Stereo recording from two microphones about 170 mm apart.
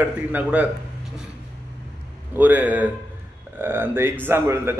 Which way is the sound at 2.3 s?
10° right (ahead or behind).